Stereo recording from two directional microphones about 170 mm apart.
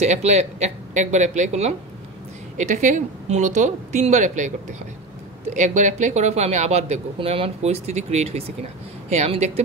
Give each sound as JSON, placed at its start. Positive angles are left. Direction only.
{"t": 0.0, "sound": "speech", "side_deg": -40}